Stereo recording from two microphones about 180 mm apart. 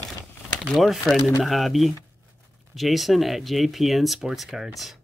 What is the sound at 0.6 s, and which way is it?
Speech, centre (ahead or behind).